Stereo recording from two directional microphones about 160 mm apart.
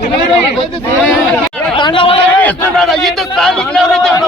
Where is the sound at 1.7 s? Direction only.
30° left (ahead or behind).